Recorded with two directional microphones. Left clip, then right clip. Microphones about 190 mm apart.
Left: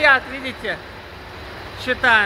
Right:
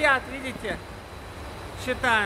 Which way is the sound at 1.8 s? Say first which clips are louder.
Left 8 dB; centre (ahead or behind).